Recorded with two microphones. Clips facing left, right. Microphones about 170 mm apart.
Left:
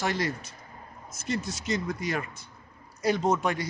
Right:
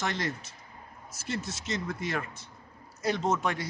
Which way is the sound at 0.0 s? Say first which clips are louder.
Left 3 dB; 5° left (ahead or behind).